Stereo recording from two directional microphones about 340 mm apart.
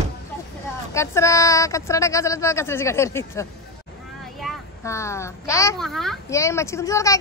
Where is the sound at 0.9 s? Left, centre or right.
Centre.